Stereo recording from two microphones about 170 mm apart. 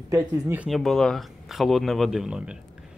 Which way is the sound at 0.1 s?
15° right (ahead or behind).